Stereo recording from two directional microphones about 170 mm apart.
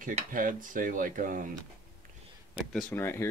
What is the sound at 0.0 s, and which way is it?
Speech, 50° right (ahead or behind).